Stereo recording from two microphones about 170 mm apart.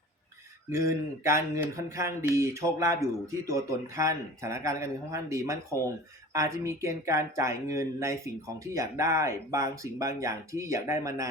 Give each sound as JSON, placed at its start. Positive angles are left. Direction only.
{"t": 0.7, "sound": "speech", "side_deg": -15}